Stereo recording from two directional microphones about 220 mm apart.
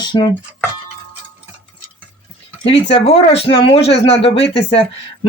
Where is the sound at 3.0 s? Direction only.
25° left (ahead or behind).